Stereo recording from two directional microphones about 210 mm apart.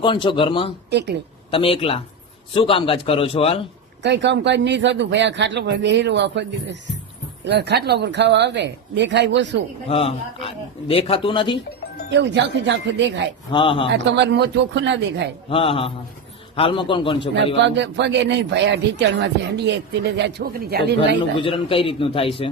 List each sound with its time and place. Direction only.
0.0 s speech: 25° left (ahead or behind)
0.9 s speech: 55° right (ahead or behind)
1.5 s speech: 25° left (ahead or behind)
4.0 s a man's voice: 55° right (ahead or behind)
9.9 s speech: 25° left (ahead or behind)
12.1 s a man's voice: 55° right (ahead or behind)
13.5 s speech: 25° left (ahead or behind)
14.0 s a man's voice: 55° right (ahead or behind)
15.4 s speech: 25° left (ahead or behind)
17.3 s a man's voice: 55° right (ahead or behind)
21.3 s speech: 25° left (ahead or behind)